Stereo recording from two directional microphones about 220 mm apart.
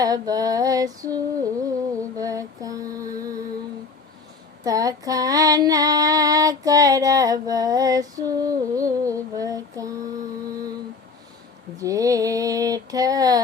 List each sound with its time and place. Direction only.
0.0 s music: 15° right (ahead or behind)
4.6 s female singing: 15° right (ahead or behind)
11.8 s female singing: 15° right (ahead or behind)